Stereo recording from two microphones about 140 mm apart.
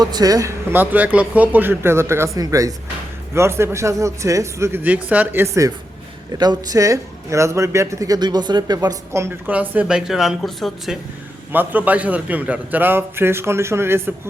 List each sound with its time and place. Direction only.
0.0 s a man's voice: 25° right (ahead or behind); by 10.9 s centre (ahead or behind)
11.5 s a man's voice: 10° right (ahead or behind)